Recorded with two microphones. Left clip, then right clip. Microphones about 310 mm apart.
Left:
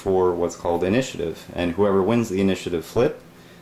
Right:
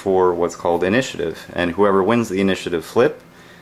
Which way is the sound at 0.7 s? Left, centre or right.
Centre.